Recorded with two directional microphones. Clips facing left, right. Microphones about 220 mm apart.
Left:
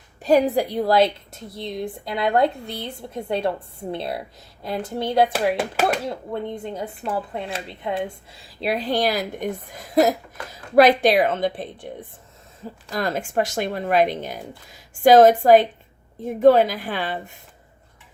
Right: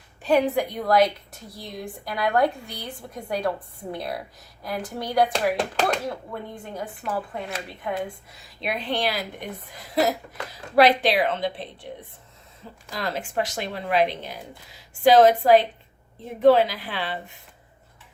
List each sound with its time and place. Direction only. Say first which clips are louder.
0.2 s a woman's voice: left 3 dB; 40° left (ahead or behind)
6.3 s a woman's voice: left 6 dB; 20° left (ahead or behind)
8.6 s a woman's voice: left 5 dB; 35° left (ahead or behind)